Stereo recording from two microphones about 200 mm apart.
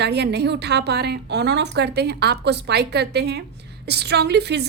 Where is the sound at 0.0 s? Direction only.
55° right (ahead or behind).